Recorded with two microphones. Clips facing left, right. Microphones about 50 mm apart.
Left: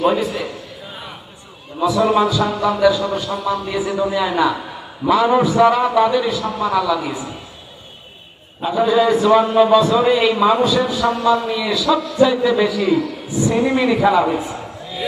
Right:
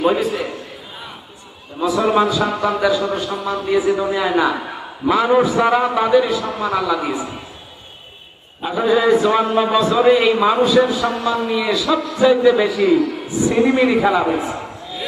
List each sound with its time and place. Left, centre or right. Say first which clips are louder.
0.0 s a man's voice: even; centre
1.9 s a man's voice: even; centre
8.6 s a man's voice: left 1 dB; centre